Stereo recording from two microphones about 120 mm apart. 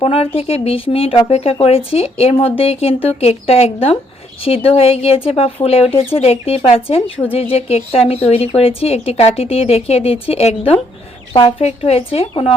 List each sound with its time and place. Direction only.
0.0 s speech: 55° left (ahead or behind)